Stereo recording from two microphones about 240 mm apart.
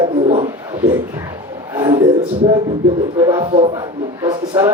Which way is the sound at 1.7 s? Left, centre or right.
Centre.